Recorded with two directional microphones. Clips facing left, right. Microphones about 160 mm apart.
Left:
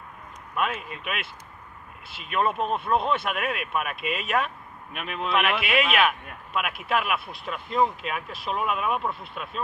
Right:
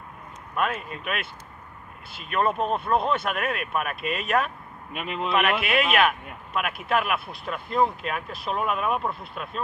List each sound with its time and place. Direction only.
0.5 s speech: 5° left (ahead or behind)
2.0 s speech: centre (ahead or behind)
4.0 s speech: 45° right (ahead or behind)
4.3 s speech: centre (ahead or behind)
4.9 s speech: 15° right (ahead or behind)
5.3 s speech: centre (ahead or behind)